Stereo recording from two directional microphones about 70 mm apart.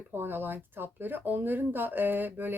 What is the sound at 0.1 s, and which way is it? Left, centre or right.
Speech, right.